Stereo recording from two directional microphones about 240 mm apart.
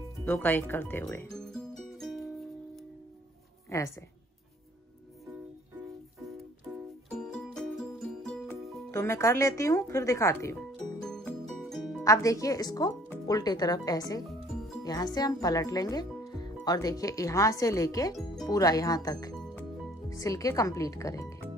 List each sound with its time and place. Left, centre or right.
0.2 s music: centre
3.7 s speech: centre
7.2 s music: centre
8.2 s speech: centre
11.0 s music: centre
12.0 s speech: centre